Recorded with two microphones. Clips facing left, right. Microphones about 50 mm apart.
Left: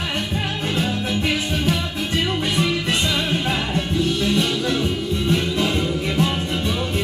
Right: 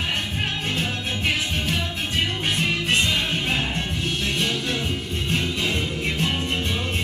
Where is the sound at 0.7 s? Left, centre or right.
Left.